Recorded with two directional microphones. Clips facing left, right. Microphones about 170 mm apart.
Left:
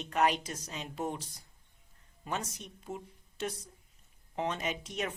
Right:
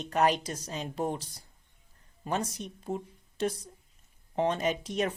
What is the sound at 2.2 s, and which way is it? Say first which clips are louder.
Speech: right 6 dB; 35° right (ahead or behind).